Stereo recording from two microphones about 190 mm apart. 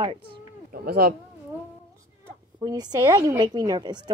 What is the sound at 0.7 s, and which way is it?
Speech, 50° right (ahead or behind).